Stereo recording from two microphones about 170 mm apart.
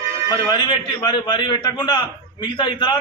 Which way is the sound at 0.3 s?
25° left (ahead or behind).